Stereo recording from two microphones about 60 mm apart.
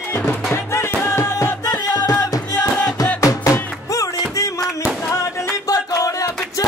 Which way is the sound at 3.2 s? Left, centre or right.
Left.